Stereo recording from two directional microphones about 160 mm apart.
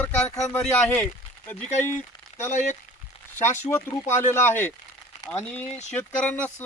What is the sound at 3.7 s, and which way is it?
Speech, 15° left (ahead or behind).